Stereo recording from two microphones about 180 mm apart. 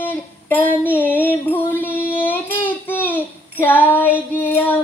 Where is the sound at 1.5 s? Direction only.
10° left (ahead or behind).